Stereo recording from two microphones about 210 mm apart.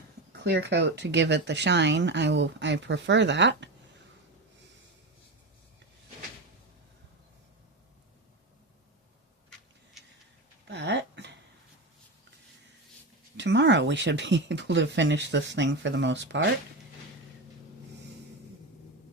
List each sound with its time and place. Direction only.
0.3 s speech: 55° right (ahead or behind)
10.7 s a sound: 55° right (ahead or behind)
13.3 s speech: 60° right (ahead or behind)